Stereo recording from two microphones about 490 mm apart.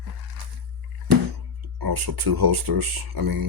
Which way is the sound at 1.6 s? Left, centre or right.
Right.